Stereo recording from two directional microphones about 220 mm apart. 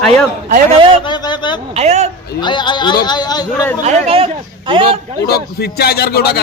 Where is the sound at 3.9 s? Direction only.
25° right (ahead or behind).